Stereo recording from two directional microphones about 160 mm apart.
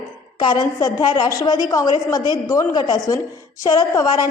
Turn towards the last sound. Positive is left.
turn(degrees=25)  # may be behind; listen again after turning